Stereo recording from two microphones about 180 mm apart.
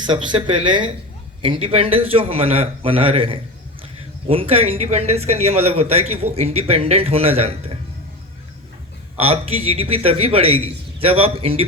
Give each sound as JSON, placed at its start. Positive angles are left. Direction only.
{"t": 0.0, "sound": "speech", "side_deg": -25}
{"t": 9.1, "sound": "speech", "side_deg": -35}